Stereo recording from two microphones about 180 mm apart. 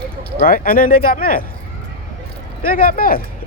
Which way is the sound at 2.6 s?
50° left (ahead or behind).